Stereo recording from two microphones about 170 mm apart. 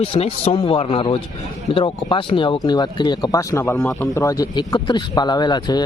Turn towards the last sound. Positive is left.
turn(degrees=25)  # may be behind; listen again after turning